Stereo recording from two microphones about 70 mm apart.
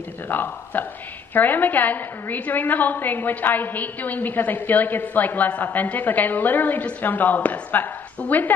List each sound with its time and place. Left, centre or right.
0.3 s a woman's voice: left